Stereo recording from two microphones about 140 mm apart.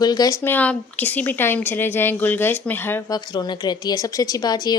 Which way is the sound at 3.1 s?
30° left (ahead or behind).